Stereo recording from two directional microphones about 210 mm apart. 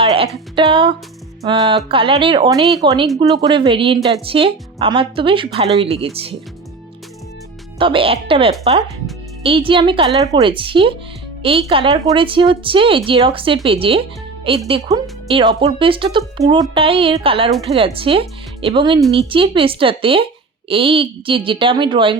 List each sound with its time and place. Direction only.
0.0 s music: 25° right (ahead or behind)
0.5 s speech: 25° right (ahead or behind)
7.8 s speech: 25° right (ahead or behind)